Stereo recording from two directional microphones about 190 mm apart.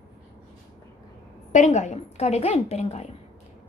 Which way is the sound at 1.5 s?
40° left (ahead or behind).